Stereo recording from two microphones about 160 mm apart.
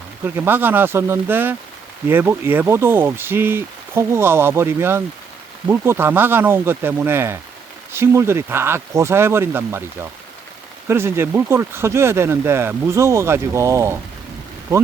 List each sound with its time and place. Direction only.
0.3 s speech: 10° right (ahead or behind)